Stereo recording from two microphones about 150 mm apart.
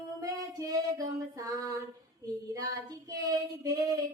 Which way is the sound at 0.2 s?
25° right (ahead or behind).